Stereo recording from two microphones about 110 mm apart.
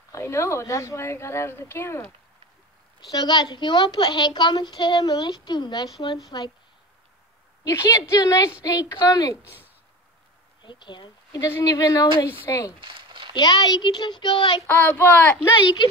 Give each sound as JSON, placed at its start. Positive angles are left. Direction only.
{"t": 0.1, "sound": "speech", "side_deg": 25}
{"t": 3.0, "sound": "a woman's voice", "side_deg": 40}
{"t": 7.6, "sound": "a woman's voice", "side_deg": 25}
{"t": 9.4, "sound": "speech", "side_deg": -15}
{"t": 10.6, "sound": "speech", "side_deg": 45}
{"t": 11.6, "sound": "a woman's voice", "side_deg": 35}
{"t": 12.3, "sound": "speech", "side_deg": 25}
{"t": 12.8, "sound": "a sound", "side_deg": -50}
{"t": 13.3, "sound": "a woman's voice", "side_deg": 40}
{"t": 14.7, "sound": "a child's voice", "side_deg": 15}
{"t": 15.6, "sound": "a woman's voice", "side_deg": 45}